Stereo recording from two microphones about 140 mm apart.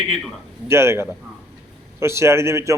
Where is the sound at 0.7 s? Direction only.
20° right (ahead or behind).